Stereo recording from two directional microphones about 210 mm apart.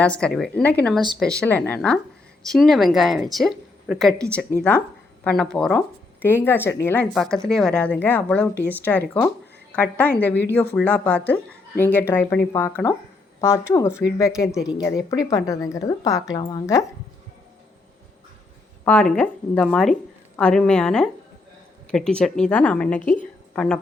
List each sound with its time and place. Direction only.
0.0 s a woman's voice: 5° left (ahead or behind)
18.9 s a woman's voice: 5° left (ahead or behind)